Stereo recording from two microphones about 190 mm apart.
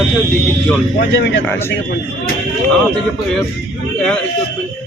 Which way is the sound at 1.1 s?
70° left (ahead or behind).